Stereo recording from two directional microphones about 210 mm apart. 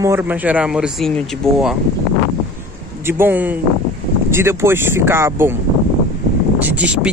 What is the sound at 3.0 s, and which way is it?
Speech, 10° right (ahead or behind).